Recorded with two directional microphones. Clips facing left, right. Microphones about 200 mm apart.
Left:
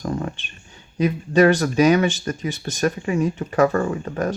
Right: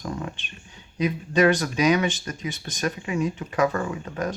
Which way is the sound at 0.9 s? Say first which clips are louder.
Left 5 dB; 50° left (ahead or behind).